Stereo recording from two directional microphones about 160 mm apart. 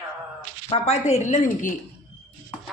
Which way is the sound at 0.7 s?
40° left (ahead or behind).